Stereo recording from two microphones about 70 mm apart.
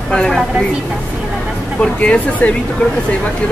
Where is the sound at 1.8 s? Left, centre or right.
Centre.